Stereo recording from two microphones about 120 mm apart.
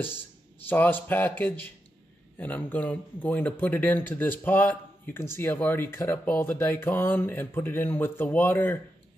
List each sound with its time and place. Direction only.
0.7 s speech: 15° left (ahead or behind)